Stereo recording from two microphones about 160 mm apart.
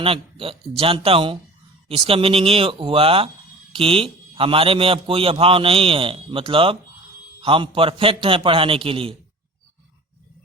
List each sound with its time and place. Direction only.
0.0 s a man's voice: 35° right (ahead or behind)